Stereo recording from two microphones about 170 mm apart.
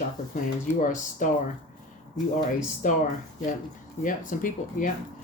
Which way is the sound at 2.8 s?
50° left (ahead or behind).